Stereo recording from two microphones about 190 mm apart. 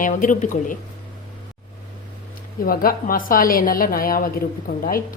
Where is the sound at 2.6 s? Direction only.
50° left (ahead or behind).